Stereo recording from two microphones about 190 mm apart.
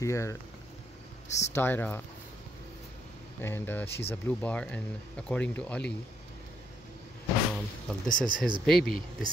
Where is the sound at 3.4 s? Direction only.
10° left (ahead or behind).